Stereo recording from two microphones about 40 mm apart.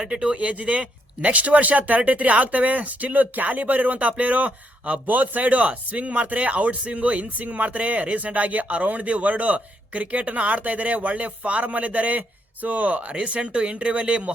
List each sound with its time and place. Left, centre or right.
0.0 s speech: right
0.3 s speech: right